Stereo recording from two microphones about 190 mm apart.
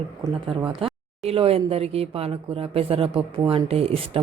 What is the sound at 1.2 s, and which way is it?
A woman's voice, 30° right (ahead or behind).